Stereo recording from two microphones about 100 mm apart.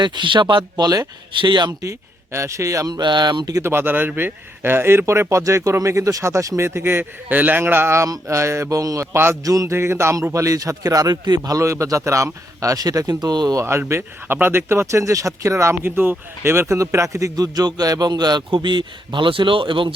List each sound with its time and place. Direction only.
0.0 s speech: 50° right (ahead or behind)
1.8 s a man's voice: 30° right (ahead or behind)
3.6 s speech: 25° right (ahead or behind)
9.1 s speech: 25° right (ahead or behind)
9.4 s a man's voice: 35° right (ahead or behind)
13.6 s a man's voice: 25° right (ahead or behind); by 19.9 s 60° right (ahead or behind)